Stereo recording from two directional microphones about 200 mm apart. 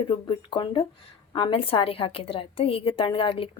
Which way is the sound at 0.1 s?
25° left (ahead or behind).